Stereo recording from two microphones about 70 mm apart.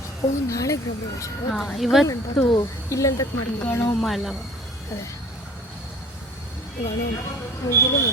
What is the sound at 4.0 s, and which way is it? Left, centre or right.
Speech, centre.